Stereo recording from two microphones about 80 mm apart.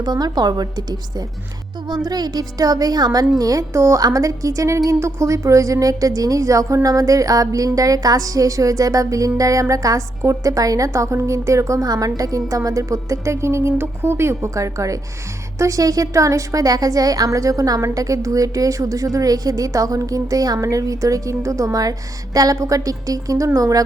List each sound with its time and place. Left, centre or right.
0.0 s a woman's voice: right
2.0 s a woman's voice: right